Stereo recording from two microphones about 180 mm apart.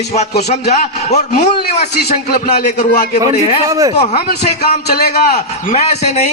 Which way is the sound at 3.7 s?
20° right (ahead or behind).